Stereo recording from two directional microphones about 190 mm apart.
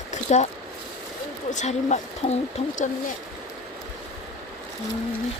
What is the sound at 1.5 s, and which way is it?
Speech, 40° left (ahead or behind).